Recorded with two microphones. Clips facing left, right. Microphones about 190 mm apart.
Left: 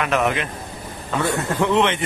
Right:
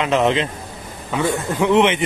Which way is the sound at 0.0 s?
20° right (ahead or behind).